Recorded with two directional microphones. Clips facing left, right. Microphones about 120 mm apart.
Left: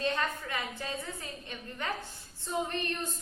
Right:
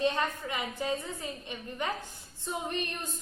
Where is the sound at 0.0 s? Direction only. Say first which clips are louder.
Right 3 dB; 15° right (ahead or behind).